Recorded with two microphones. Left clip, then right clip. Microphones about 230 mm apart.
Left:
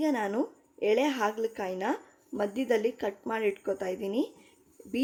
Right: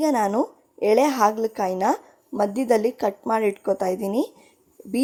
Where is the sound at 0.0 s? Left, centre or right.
Right.